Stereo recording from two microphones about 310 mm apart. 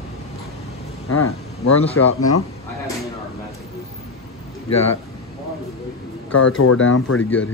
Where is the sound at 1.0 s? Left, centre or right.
Left.